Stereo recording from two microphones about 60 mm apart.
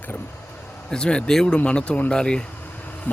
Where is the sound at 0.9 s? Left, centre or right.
Centre.